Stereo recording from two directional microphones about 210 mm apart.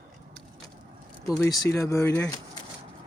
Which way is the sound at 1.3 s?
20° left (ahead or behind).